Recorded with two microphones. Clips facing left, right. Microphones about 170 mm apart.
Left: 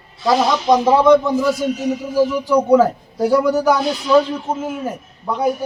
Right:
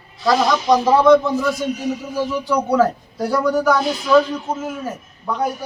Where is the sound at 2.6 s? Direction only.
20° left (ahead or behind).